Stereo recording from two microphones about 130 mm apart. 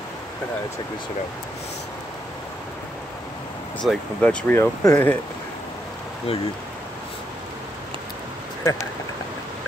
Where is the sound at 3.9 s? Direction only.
10° left (ahead or behind).